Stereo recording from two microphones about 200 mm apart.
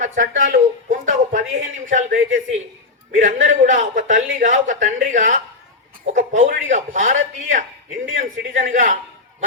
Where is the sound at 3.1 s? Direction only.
40° right (ahead or behind).